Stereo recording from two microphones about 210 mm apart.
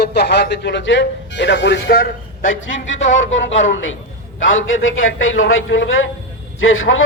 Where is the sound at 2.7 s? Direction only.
65° left (ahead or behind).